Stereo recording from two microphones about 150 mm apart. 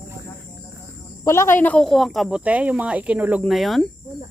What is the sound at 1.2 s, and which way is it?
Speech, 20° left (ahead or behind).